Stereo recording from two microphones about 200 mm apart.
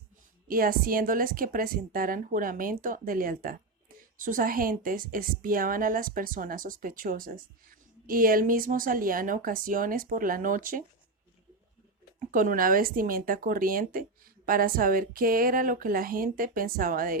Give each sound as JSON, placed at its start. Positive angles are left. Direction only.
{"t": 0.4, "sound": "a woman's voice", "side_deg": -45}
{"t": 12.3, "sound": "a woman's voice", "side_deg": -40}